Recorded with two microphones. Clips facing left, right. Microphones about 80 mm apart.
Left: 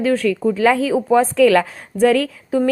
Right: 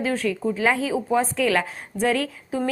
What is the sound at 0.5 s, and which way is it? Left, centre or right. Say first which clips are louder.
A woman's voice: left 6 dB; left.